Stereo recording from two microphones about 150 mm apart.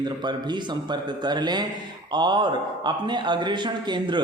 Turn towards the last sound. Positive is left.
turn(degrees=-30)  # may be behind; listen again after turning